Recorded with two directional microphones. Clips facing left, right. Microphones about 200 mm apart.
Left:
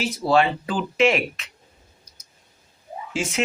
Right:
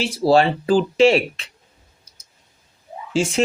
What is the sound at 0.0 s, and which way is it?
Speech, 30° right (ahead or behind).